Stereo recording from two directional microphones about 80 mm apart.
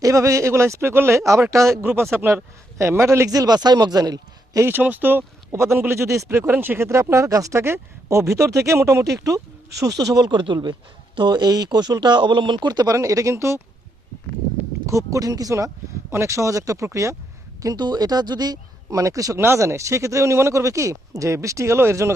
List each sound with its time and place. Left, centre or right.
0.0 s speech: right
3.2 s speech: right
4.6 s speech: right
5.5 s a man's voice: right
12.6 s speech: right
13.0 s speech: right
14.8 s speech: right
16.0 s speech: right
17.7 s speech: right